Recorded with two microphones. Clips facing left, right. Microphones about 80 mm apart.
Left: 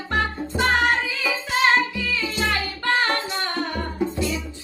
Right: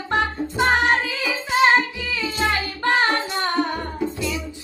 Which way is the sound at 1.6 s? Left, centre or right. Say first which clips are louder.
Right 3 dB; right.